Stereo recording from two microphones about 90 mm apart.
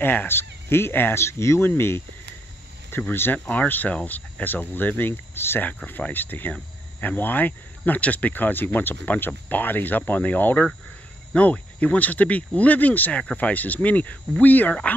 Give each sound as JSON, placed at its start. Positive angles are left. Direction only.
{"t": 0.0, "sound": "speech", "side_deg": 20}